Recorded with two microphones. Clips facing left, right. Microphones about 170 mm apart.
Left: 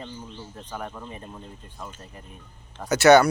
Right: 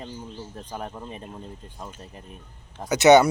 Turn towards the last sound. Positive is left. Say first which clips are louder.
# even
turn(degrees=-20)  # may be behind; listen again after turning